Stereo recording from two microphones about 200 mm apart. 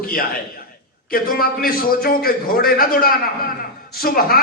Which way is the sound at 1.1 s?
45° left (ahead or behind).